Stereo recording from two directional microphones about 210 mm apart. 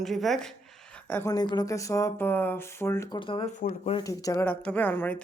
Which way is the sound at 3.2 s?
25° left (ahead or behind).